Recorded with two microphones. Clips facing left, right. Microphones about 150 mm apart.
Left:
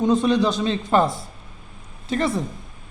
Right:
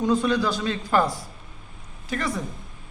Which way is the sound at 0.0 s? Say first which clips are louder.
Left 4 dB; 20° left (ahead or behind).